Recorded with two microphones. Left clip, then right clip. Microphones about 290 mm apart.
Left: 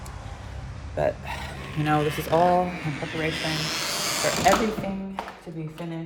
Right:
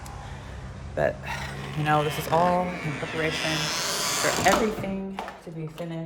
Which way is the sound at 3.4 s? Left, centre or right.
Centre.